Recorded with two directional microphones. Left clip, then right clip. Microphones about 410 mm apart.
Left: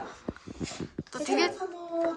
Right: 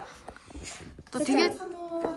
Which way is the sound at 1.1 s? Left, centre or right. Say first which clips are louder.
Right 2 dB; centre.